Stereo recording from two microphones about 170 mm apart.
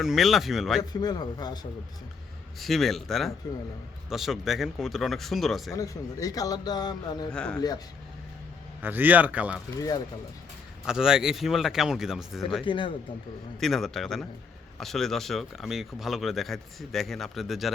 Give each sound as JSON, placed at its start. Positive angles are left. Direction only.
{"t": 0.0, "sound": "speech", "side_deg": 0}
{"t": 0.8, "sound": "speech", "side_deg": 25}
{"t": 2.6, "sound": "speech", "side_deg": 0}
{"t": 5.7, "sound": "speech", "side_deg": 20}
{"t": 7.3, "sound": "speech", "side_deg": 5}
{"t": 8.8, "sound": "speech", "side_deg": -10}
{"t": 9.7, "sound": "speech", "side_deg": 20}
{"t": 10.8, "sound": "speech", "side_deg": -5}
{"t": 12.6, "sound": "speech", "side_deg": 30}
{"t": 13.6, "sound": "speech", "side_deg": 0}